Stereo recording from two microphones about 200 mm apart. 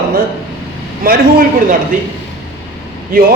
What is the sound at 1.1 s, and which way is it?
Speech, 45° right (ahead or behind).